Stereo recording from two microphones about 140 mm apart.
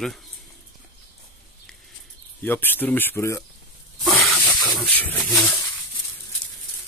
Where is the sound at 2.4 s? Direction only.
15° left (ahead or behind).